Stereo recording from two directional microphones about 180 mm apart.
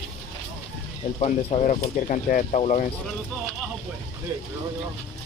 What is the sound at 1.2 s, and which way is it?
Speech, 35° left (ahead or behind).